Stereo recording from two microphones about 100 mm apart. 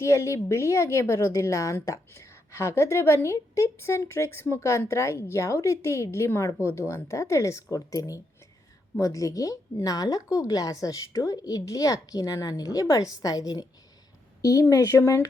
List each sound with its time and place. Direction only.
0.0 s a woman's voice: 30° left (ahead or behind)